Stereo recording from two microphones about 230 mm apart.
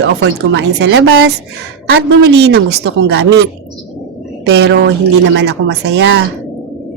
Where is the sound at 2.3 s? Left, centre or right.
Right.